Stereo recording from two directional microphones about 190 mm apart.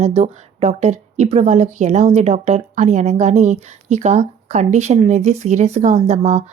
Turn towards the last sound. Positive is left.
turn(degrees=-35)  # may be behind; listen again after turning